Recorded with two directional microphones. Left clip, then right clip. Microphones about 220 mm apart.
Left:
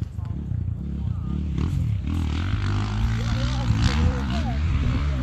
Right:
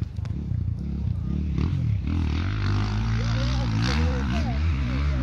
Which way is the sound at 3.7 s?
Centre (ahead or behind).